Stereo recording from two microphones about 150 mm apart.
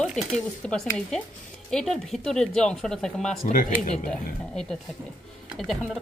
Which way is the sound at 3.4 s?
60° left (ahead or behind).